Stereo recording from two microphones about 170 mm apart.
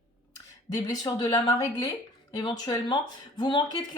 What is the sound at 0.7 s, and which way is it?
Speech, 20° left (ahead or behind).